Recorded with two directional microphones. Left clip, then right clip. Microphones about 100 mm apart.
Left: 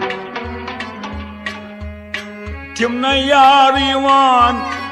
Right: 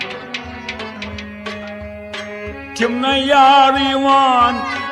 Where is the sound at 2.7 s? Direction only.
40° left (ahead or behind).